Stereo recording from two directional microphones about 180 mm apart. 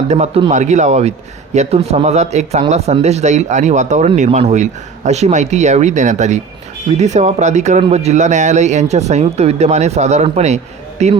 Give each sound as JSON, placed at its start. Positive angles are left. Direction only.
{"t": 0.1, "sound": "speech", "side_deg": -35}